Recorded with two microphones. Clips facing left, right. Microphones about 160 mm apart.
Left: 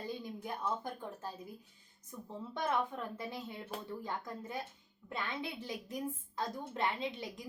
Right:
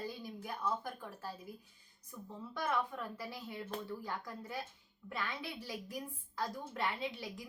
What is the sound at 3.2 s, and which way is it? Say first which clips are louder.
A woman's voice: left 1 dB; 20° left (ahead or behind).